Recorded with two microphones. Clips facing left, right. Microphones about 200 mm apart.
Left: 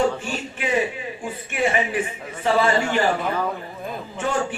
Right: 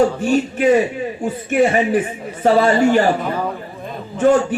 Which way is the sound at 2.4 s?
45° right (ahead or behind).